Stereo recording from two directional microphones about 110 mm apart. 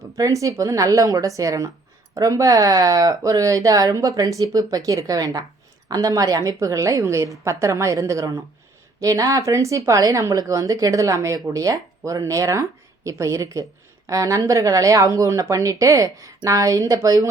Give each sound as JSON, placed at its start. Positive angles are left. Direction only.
{"t": 0.2, "sound": "a woman's voice", "side_deg": -30}